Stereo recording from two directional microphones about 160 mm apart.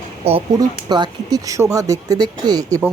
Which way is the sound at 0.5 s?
25° right (ahead or behind).